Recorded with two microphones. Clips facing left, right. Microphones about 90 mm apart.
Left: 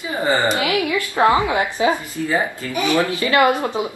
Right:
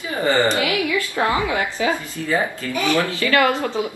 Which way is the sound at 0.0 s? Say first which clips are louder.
Even; 20° left (ahead or behind).